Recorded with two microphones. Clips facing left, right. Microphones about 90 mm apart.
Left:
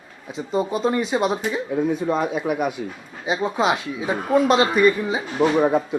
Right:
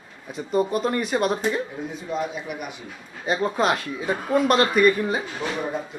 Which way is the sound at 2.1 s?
50° left (ahead or behind).